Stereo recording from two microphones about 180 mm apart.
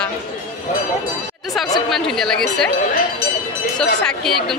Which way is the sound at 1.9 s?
Centre (ahead or behind).